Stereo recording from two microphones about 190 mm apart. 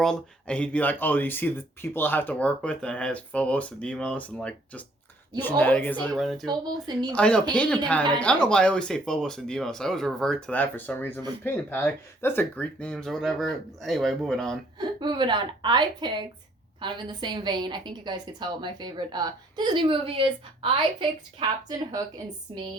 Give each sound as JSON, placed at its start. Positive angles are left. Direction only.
{"t": 0.0, "sound": "speech", "side_deg": 5}
{"t": 6.4, "sound": "a woman's voice", "side_deg": -20}
{"t": 7.1, "sound": "speech", "side_deg": 5}
{"t": 14.8, "sound": "a woman's voice", "side_deg": -25}